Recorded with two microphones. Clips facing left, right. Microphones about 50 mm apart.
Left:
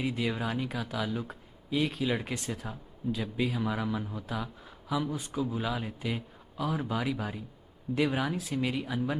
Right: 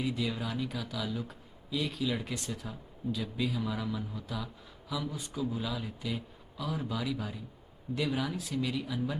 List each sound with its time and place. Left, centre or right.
0.0 s speech: left